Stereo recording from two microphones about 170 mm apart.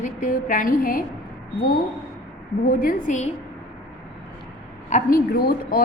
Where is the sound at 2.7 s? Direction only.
55° left (ahead or behind).